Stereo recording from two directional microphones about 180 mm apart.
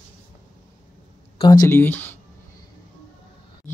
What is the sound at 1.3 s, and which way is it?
Speech, 20° left (ahead or behind).